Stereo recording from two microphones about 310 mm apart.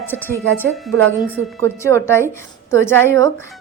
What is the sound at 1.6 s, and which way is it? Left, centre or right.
Speech, centre.